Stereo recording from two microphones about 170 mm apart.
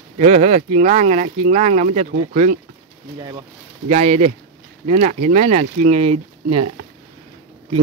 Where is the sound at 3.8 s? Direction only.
40° right (ahead or behind).